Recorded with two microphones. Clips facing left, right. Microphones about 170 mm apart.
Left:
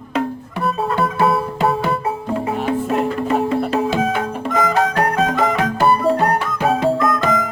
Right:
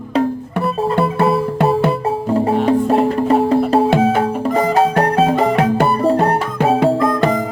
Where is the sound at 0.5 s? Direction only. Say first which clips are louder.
Right 2 dB; 60° right (ahead or behind).